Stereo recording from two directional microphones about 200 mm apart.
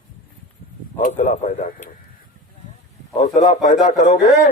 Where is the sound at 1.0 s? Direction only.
40° left (ahead or behind).